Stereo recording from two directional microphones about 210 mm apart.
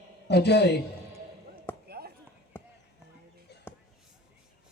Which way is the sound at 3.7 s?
10° left (ahead or behind).